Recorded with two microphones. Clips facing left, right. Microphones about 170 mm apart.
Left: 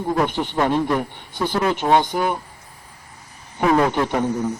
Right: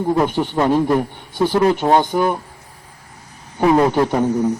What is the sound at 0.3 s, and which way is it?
Speech, 40° right (ahead or behind).